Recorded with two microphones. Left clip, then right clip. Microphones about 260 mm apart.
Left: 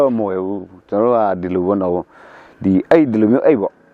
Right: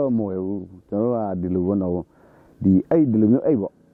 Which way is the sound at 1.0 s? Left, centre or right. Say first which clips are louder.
Left 9 dB; centre.